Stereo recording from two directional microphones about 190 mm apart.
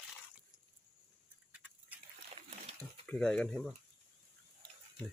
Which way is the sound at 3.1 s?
5° left (ahead or behind).